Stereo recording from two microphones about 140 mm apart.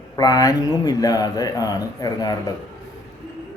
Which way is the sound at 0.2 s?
25° left (ahead or behind).